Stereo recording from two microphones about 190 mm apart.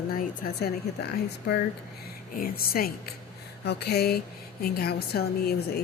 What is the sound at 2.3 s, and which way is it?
A woman's voice, 50° left (ahead or behind).